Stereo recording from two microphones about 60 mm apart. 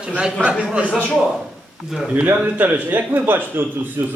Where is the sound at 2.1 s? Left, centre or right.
Right.